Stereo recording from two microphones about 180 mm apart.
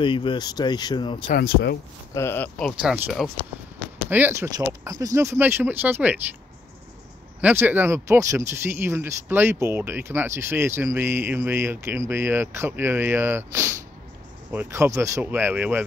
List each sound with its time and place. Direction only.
0.0 s speech: 25° left (ahead or behind)
1.3 s speech: 60° left (ahead or behind)
2.1 s speech: 10° left (ahead or behind)
2.8 s speech: 5° right (ahead or behind)
4.1 s speech: 15° right (ahead or behind)
7.3 s speech: 10° right (ahead or behind)